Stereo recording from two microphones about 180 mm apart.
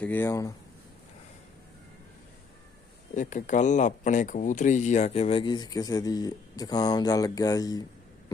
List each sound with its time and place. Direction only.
0.0 s speech: 10° left (ahead or behind)
3.2 s speech: 45° left (ahead or behind); by 7.9 s 20° left (ahead or behind)